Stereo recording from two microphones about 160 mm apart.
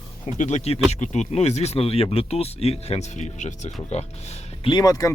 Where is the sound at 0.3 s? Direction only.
45° left (ahead or behind).